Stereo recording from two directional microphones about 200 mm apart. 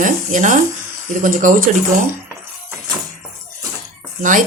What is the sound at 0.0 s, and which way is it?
Speech, 40° right (ahead or behind).